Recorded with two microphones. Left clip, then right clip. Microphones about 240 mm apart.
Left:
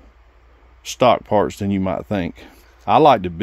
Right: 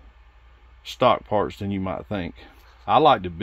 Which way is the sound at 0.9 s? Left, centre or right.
Left.